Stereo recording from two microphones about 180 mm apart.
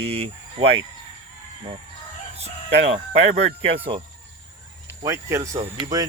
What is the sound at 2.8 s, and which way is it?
Speech, 35° right (ahead or behind).